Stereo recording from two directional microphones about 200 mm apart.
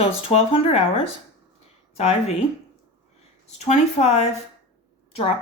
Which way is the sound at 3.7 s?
35° left (ahead or behind).